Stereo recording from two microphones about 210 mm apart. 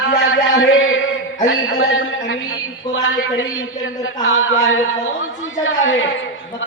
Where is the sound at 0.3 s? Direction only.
70° left (ahead or behind).